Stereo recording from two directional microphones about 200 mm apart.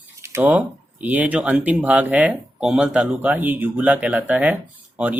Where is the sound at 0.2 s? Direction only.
10° right (ahead or behind).